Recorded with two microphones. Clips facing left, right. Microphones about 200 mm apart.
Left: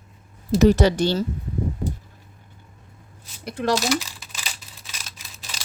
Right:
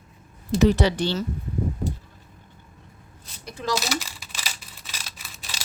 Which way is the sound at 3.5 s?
65° left (ahead or behind).